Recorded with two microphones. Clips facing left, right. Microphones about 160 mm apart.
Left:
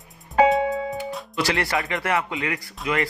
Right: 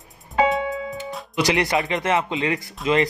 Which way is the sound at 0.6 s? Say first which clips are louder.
Left 3 dB; 40° left (ahead or behind).